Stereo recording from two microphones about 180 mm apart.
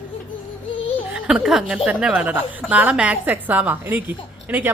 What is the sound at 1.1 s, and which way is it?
A woman's voice, 5° right (ahead or behind).